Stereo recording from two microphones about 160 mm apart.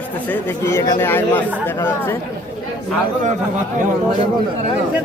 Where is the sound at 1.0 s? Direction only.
15° left (ahead or behind).